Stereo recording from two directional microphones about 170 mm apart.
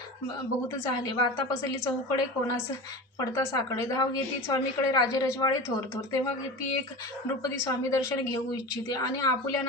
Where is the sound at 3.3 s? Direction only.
20° left (ahead or behind).